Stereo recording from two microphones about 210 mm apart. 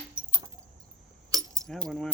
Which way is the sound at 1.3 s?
15° right (ahead or behind).